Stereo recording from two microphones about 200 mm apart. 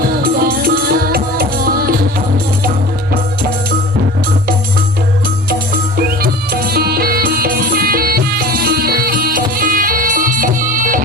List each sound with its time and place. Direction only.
0.2 s music: 45° right (ahead or behind)
6.2 s music: 50° right (ahead or behind)